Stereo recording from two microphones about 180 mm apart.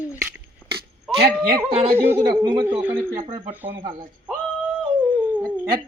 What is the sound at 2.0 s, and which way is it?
Speech, 10° right (ahead or behind).